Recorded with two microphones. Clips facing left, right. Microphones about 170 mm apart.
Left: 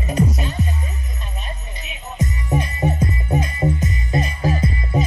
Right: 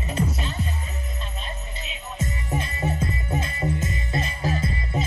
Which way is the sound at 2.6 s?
15° left (ahead or behind).